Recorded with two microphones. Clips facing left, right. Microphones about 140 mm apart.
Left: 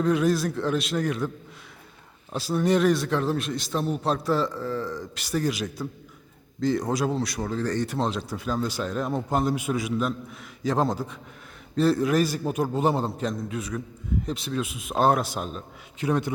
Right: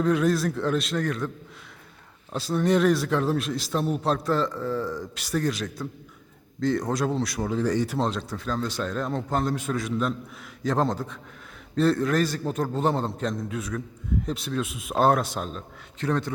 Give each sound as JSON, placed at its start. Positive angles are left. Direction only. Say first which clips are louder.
{"t": 0.0, "sound": "a man's voice", "louder": "even", "side_deg": 0}
{"t": 2.3, "sound": "a man's voice", "louder": "even", "side_deg": 5}